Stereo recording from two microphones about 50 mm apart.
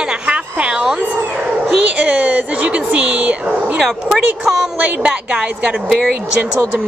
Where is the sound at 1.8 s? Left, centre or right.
Right.